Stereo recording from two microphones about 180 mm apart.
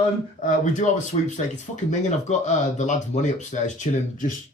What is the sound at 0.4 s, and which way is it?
Speech, 45° left (ahead or behind).